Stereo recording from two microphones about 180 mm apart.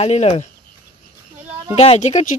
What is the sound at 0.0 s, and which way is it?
Speech, 35° left (ahead or behind).